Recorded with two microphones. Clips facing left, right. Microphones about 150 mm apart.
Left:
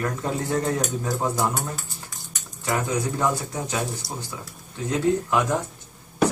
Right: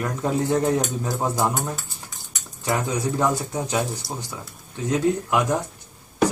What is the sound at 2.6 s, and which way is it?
Speech, 20° right (ahead or behind).